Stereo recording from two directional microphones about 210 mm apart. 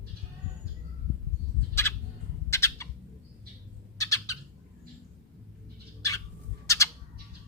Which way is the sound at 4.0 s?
15° left (ahead or behind).